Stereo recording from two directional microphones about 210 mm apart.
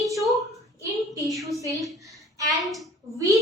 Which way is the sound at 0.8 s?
15° right (ahead or behind).